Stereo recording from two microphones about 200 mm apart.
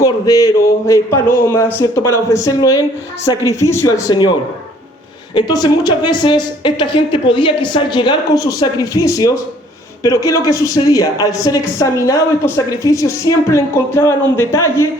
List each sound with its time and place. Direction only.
0.0 s a woman's voice: 15° left (ahead or behind)
5.3 s a woman's voice: 20° left (ahead or behind)